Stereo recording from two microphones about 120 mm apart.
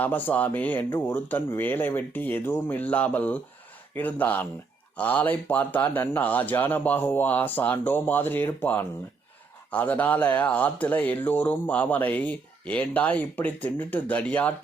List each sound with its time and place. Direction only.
0.0 s speech: 15° left (ahead or behind)